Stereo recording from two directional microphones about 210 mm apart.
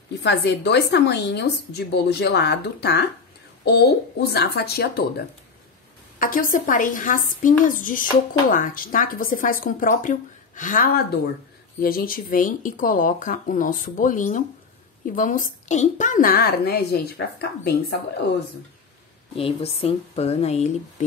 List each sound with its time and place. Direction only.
0.2 s a woman's voice: 55° left (ahead or behind)
19.3 s speech: 25° left (ahead or behind)